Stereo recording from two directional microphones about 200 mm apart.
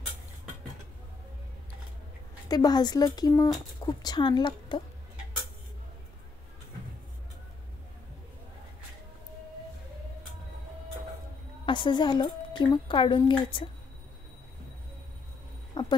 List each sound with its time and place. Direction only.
2.4 s a woman's voice: 20° left (ahead or behind)
11.6 s a woman's voice: 25° left (ahead or behind)
15.7 s a sound: 25° left (ahead or behind)